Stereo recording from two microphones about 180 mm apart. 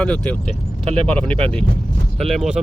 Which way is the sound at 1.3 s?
30° right (ahead or behind).